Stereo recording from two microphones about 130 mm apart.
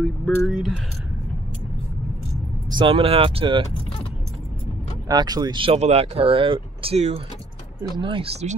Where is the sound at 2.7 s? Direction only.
40° right (ahead or behind).